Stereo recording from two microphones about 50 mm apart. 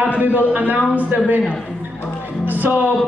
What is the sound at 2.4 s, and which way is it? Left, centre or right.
Music, right.